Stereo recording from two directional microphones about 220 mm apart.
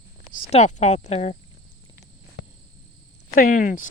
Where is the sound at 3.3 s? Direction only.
40° left (ahead or behind).